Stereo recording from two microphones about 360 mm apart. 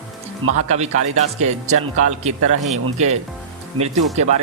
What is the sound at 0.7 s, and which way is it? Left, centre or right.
A man's voice, centre.